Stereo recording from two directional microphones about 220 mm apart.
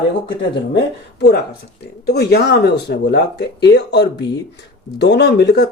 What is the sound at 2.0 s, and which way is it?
Speech, 50° left (ahead or behind).